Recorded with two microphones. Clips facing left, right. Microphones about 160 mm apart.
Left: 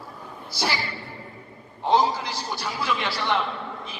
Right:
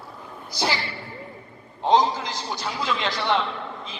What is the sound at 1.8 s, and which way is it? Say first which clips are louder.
A woman's voice: right 1 dB; 20° right (ahead or behind).